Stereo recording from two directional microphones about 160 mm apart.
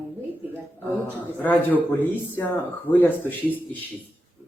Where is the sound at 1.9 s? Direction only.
10° left (ahead or behind).